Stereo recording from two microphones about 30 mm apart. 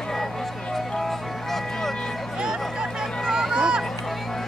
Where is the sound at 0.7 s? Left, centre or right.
Centre.